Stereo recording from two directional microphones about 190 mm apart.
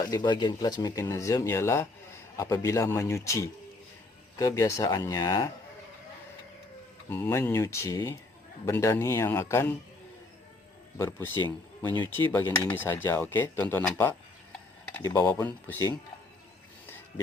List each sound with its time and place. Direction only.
0.0 s speech: 20° left (ahead or behind)
7.1 s speech: 15° left (ahead or behind)
10.9 s speech: 15° left (ahead or behind)
11.9 s speech: 25° right (ahead or behind)
12.1 s speech: 10° left (ahead or behind)